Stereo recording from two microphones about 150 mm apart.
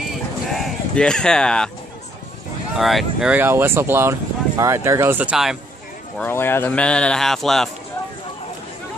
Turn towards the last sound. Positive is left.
turn(degrees=0)  # may be behind; listen again after turning